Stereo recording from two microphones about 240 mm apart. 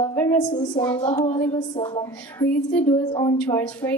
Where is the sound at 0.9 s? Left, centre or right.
Centre.